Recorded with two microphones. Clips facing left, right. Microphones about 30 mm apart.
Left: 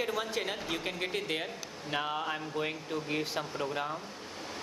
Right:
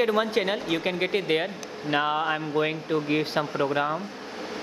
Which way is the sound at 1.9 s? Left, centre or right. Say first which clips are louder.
Right 9 dB; right.